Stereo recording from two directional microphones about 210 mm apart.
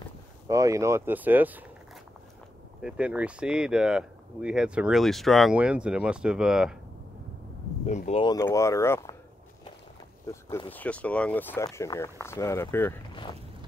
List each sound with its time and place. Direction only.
0.5 s speech: 15° right (ahead or behind)
2.8 s speech: 5° right (ahead or behind)
7.8 s speech: 30° left (ahead or behind); by 9.1 s 15° left (ahead or behind)
10.2 s speech: 15° left (ahead or behind)
13.1 s a sound: 25° left (ahead or behind)